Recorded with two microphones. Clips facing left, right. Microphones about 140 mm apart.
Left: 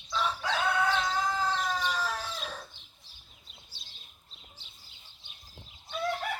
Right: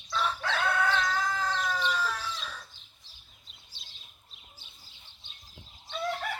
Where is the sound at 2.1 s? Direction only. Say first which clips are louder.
Left 1 dB; 45° left (ahead or behind).